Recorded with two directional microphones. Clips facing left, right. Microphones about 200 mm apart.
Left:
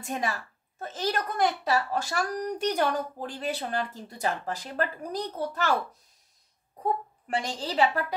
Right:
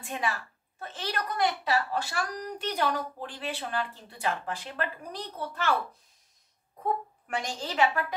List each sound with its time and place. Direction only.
0.0 s a woman's voice: 40° left (ahead or behind)
7.2 s a woman's voice: 35° left (ahead or behind)